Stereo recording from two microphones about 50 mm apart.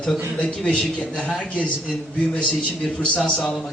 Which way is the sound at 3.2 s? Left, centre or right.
Centre.